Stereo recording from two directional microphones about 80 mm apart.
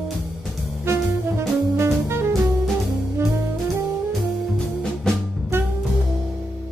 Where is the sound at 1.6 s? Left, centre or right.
Right.